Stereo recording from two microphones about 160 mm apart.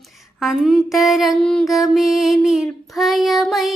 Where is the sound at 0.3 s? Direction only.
Centre (ahead or behind).